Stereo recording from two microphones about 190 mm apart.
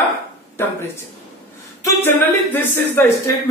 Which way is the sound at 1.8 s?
10° left (ahead or behind).